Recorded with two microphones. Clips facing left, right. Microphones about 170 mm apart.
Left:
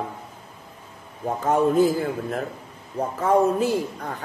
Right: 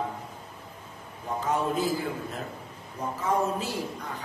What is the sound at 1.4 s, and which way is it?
A man's voice, 50° left (ahead or behind).